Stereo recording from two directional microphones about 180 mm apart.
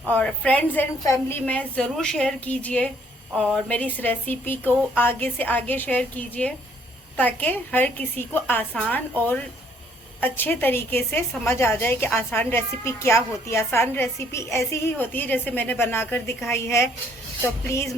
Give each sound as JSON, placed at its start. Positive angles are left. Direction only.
{"t": 0.1, "sound": "a woman's voice", "side_deg": 10}